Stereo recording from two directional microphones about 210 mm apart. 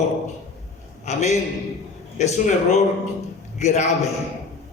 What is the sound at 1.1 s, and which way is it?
A man's voice, 35° left (ahead or behind).